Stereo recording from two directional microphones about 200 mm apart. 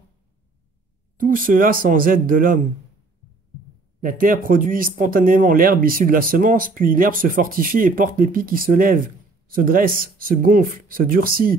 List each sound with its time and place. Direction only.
1.2 s speech: 45° right (ahead or behind)
4.0 s speech: 45° right (ahead or behind)